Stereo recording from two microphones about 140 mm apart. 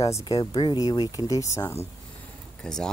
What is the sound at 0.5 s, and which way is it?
Speech, 35° left (ahead or behind).